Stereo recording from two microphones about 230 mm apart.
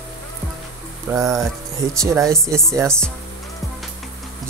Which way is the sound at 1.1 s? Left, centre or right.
Centre.